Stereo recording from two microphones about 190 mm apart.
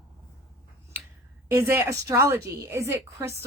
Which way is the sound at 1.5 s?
10° right (ahead or behind).